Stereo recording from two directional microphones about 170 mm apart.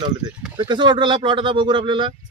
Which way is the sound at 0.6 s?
25° right (ahead or behind).